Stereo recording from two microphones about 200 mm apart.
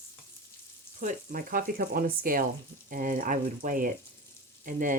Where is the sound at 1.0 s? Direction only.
40° right (ahead or behind).